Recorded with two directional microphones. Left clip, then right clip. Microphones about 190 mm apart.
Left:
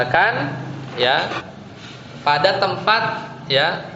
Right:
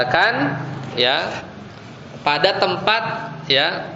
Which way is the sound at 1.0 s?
45° right (ahead or behind).